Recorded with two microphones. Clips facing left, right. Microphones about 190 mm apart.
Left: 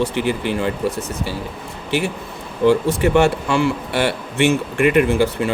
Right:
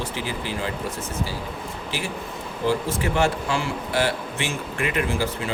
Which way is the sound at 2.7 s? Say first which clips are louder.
Left 9 dB; 65° left (ahead or behind).